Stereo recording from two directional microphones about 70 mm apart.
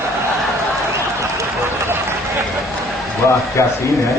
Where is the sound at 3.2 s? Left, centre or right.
Left.